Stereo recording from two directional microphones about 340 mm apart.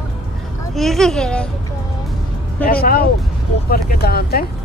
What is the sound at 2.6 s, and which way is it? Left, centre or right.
Speech, left.